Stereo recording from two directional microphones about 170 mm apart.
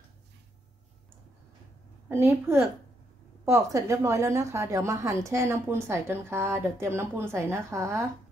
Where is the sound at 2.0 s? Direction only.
15° right (ahead or behind).